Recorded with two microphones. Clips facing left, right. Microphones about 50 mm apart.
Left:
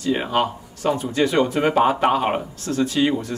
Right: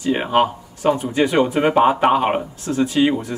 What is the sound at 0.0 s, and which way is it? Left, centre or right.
Speech, right.